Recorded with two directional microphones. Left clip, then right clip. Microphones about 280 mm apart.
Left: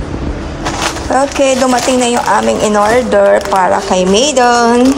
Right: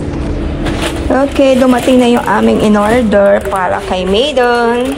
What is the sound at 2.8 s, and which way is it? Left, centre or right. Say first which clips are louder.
Speech: left 3 dB; centre.